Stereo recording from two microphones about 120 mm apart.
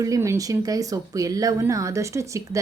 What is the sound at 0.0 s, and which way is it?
Speech, 25° right (ahead or behind).